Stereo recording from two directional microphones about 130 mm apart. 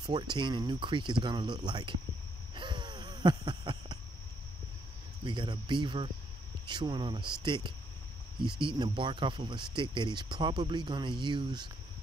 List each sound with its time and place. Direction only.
0.0 s speech: 35° right (ahead or behind)
2.5 s wheeze: 35° right (ahead or behind)
5.2 s speech: 35° right (ahead or behind)